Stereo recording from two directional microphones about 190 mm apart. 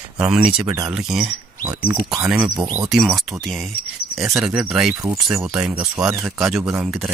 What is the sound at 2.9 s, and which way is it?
Speech, centre (ahead or behind).